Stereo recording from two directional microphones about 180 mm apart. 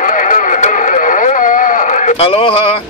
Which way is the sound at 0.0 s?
45° left (ahead or behind).